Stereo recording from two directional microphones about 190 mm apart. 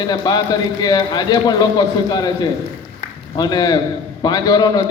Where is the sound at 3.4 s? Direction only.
20° left (ahead or behind).